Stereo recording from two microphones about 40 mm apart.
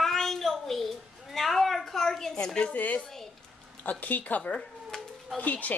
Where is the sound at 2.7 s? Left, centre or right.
Left.